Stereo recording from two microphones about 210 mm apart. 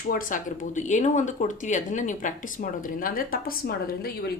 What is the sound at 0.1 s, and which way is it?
Speech, 40° left (ahead or behind).